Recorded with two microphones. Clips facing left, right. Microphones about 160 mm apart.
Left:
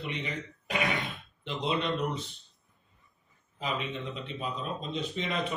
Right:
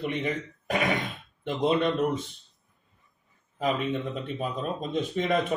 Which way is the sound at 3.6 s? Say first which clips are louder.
Right 7 dB; 50° right (ahead or behind).